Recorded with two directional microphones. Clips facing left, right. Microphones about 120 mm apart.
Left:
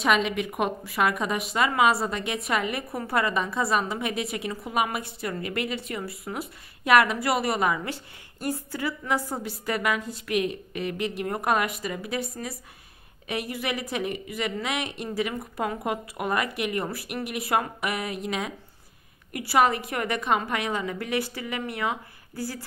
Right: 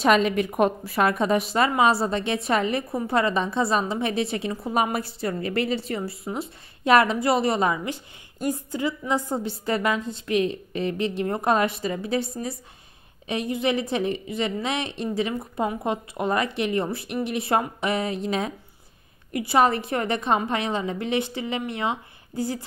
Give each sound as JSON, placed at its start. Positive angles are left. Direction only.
{"t": 0.0, "sound": "a woman's voice", "side_deg": -40}